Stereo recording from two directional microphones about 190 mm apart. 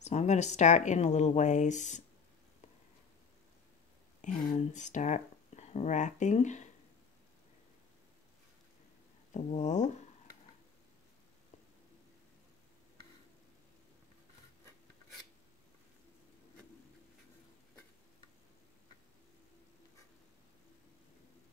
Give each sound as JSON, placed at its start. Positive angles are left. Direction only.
{"t": 0.0, "sound": "speech", "side_deg": 35}
{"t": 4.5, "sound": "speech", "side_deg": 40}
{"t": 9.3, "sound": "speech", "side_deg": 35}